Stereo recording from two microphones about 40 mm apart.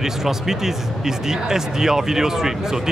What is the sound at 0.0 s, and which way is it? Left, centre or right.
Speech, centre.